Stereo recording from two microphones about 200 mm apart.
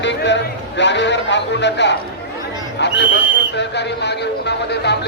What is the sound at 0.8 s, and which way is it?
A man's voice, 60° left (ahead or behind).